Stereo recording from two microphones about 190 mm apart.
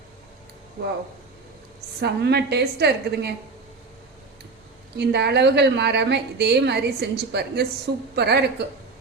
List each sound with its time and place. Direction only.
2.0 s a woman's voice: 60° right (ahead or behind)
4.9 s a woman's voice: 60° right (ahead or behind)